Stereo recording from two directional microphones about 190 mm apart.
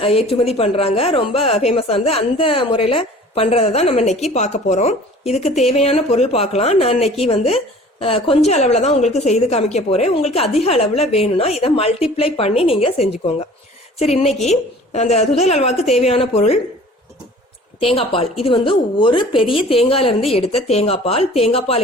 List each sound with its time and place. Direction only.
0.0 s a woman's voice: 30° left (ahead or behind)
14.0 s a woman's voice: 35° left (ahead or behind)
17.7 s a woman's voice: 30° left (ahead or behind)